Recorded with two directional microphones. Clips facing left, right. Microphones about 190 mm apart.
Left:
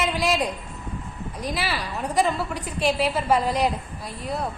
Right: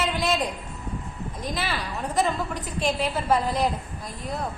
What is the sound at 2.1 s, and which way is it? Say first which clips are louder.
A woman's voice: left 2 dB; 10° left (ahead or behind).